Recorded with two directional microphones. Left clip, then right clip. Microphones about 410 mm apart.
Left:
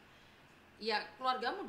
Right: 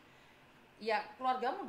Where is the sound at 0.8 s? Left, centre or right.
Centre.